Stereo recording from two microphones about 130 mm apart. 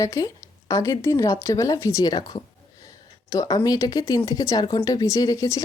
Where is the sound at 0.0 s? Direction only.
25° left (ahead or behind).